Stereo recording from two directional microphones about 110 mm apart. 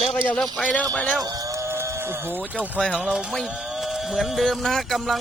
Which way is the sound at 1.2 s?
35° right (ahead or behind).